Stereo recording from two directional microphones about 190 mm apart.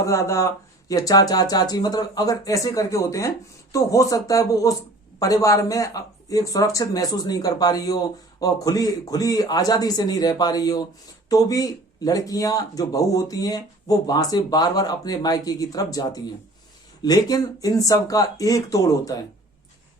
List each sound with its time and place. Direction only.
0.0 s speech: 15° left (ahead or behind)